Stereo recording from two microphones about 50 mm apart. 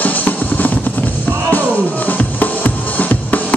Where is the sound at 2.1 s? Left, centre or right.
Left.